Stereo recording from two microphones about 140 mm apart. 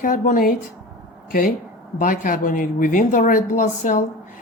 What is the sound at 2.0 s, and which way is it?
Speech, 70° left (ahead or behind).